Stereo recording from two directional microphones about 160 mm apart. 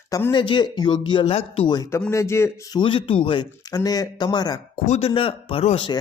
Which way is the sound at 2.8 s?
30° left (ahead or behind).